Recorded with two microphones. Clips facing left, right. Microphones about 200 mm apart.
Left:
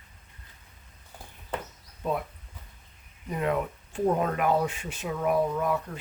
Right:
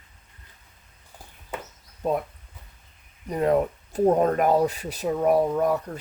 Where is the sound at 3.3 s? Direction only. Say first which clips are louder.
Right 6 dB; 40° right (ahead or behind).